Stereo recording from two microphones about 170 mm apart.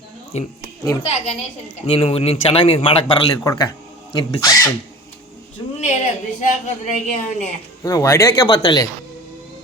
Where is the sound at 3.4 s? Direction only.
20° left (ahead or behind).